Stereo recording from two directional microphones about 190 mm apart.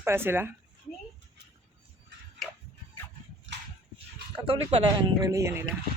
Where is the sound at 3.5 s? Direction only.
70° right (ahead or behind).